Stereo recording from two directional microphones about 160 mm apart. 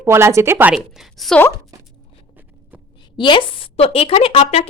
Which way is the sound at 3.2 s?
30° left (ahead or behind).